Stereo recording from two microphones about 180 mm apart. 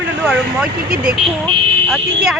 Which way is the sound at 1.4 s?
10° left (ahead or behind).